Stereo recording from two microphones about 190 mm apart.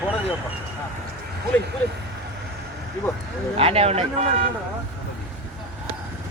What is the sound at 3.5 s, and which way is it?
Speech, 30° right (ahead or behind).